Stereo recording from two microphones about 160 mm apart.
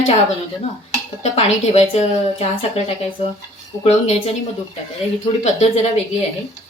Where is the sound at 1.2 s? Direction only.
40° left (ahead or behind).